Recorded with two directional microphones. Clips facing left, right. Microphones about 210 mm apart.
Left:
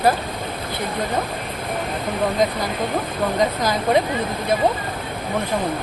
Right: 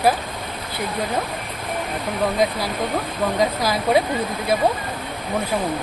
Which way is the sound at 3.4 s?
5° right (ahead or behind).